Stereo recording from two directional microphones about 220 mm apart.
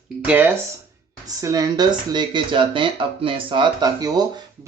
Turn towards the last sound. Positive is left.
turn(degrees=-20)  # may be behind; listen again after turning